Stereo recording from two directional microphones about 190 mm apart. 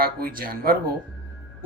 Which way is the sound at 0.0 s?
50° right (ahead or behind).